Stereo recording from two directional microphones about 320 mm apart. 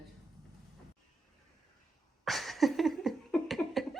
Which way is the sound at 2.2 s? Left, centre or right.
Centre.